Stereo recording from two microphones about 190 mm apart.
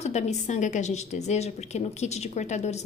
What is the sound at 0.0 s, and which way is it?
A woman's voice, 35° left (ahead or behind).